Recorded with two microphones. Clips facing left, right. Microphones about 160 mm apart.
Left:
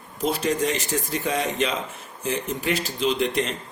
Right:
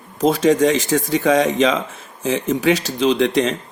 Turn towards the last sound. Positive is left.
turn(degrees=-90)